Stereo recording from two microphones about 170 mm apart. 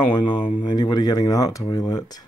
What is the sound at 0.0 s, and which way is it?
Speech, 25° left (ahead or behind).